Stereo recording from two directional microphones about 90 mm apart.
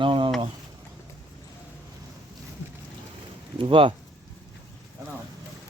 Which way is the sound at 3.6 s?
75° right (ahead or behind).